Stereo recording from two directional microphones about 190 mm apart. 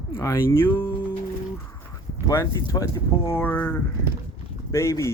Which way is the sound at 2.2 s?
15° left (ahead or behind).